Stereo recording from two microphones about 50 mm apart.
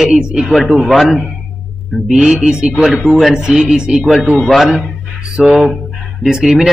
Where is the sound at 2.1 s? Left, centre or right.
Centre.